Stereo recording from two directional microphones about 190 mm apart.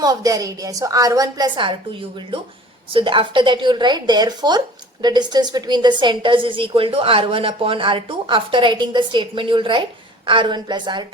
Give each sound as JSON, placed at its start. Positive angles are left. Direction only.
{"t": 0.0, "sound": "a woman's voice", "side_deg": -20}
{"t": 2.9, "sound": "a woman's voice", "side_deg": -25}